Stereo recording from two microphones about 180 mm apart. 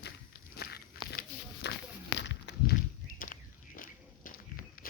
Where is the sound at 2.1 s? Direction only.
85° left.